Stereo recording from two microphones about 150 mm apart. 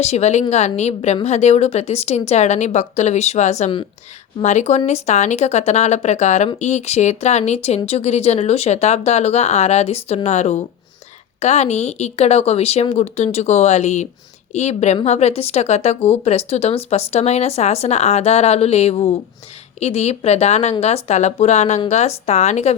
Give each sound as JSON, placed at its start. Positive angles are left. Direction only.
{"t": 0.0, "sound": "a woman's voice", "side_deg": 45}